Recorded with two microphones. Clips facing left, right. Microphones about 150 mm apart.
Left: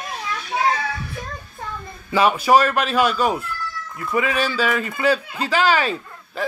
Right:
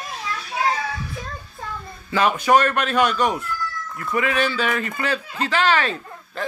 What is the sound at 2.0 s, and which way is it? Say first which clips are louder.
Speech: left 2 dB; 10° left (ahead or behind).